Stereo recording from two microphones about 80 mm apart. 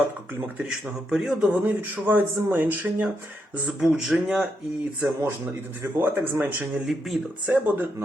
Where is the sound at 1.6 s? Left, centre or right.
Right.